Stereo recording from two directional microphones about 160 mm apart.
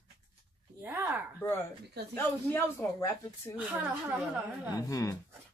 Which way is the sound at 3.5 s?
10° right (ahead or behind).